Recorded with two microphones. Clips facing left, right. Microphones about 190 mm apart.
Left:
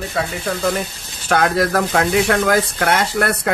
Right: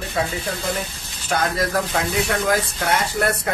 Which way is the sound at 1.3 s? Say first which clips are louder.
Left 5 dB; 70° left (ahead or behind).